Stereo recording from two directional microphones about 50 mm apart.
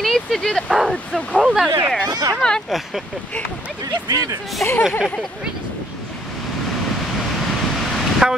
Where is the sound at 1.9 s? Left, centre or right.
Centre.